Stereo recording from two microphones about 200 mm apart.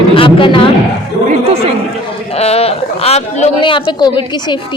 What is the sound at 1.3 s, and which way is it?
Chatter, 30° right (ahead or behind).